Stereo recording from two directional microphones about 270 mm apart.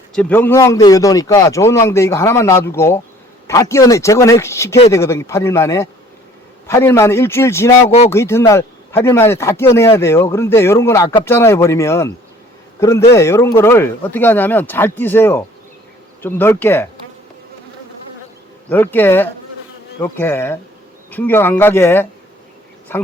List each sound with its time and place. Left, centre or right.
0.1 s a man's voice: centre
7.9 s speech: left
8.1 s a man's voice: centre
18.7 s a man's voice: centre